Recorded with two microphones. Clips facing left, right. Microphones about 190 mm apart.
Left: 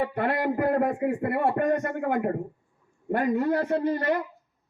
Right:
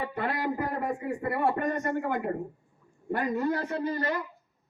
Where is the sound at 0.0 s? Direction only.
60° left (ahead or behind).